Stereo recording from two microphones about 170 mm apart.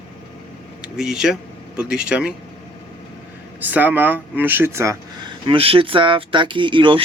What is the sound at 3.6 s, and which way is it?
Speech, 10° right (ahead or behind).